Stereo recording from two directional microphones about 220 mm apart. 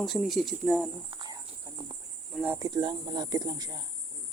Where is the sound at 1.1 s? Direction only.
20° right (ahead or behind).